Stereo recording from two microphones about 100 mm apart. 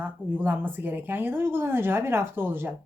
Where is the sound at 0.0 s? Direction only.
20° right (ahead or behind).